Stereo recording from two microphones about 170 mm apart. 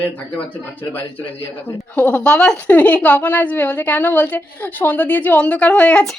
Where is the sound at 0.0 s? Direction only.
10° left (ahead or behind).